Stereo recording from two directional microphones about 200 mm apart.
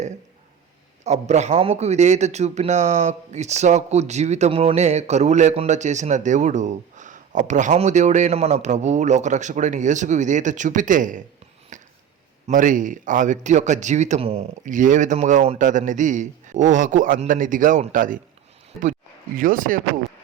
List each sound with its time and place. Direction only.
1.0 s a man's voice: 35° right (ahead or behind)
11.7 s a sound: 40° right (ahead or behind)
12.5 s a man's voice: 40° right (ahead or behind)
19.4 s speech: 45° right (ahead or behind)